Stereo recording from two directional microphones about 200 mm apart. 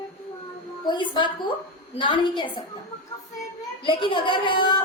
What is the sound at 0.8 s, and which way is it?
A woman's voice, 25° left (ahead or behind).